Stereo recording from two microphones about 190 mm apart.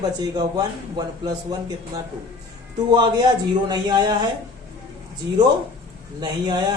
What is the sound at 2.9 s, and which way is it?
Speech, 25° right (ahead or behind).